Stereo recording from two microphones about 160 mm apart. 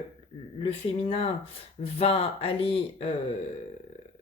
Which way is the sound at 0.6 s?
35° left (ahead or behind).